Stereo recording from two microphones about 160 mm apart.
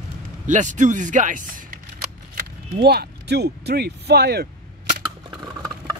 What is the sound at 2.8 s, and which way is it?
Speech, 90° right.